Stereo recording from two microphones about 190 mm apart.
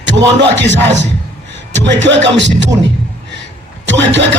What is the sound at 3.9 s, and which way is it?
Speech, 70° right (ahead or behind).